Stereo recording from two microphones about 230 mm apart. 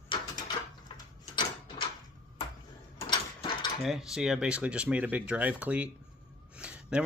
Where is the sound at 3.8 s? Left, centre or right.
Centre.